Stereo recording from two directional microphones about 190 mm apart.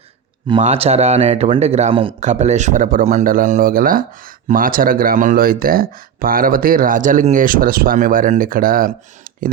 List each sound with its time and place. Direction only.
0.6 s speech: 35° right (ahead or behind)